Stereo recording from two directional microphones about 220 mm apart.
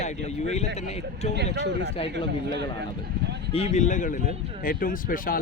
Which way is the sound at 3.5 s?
30° left (ahead or behind).